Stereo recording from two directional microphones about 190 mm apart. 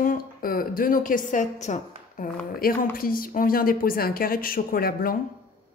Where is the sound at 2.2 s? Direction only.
50° left (ahead or behind).